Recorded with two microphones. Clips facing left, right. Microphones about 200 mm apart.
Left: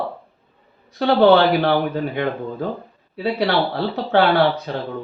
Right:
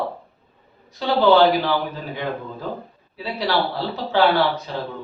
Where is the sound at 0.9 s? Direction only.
60° left (ahead or behind).